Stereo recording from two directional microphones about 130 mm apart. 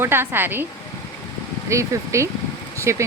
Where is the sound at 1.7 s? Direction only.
20° right (ahead or behind).